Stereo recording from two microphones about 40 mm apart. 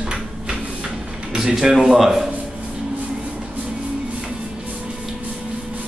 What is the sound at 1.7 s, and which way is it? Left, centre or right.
Speech, centre.